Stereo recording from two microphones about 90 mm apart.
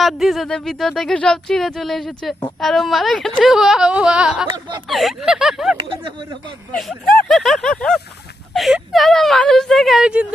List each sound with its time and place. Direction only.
0.0 s speech: centre (ahead or behind)
6.7 s speech: 5° left (ahead or behind)